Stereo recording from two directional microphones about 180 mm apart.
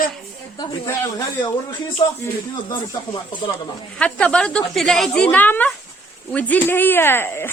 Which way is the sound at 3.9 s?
5° left (ahead or behind).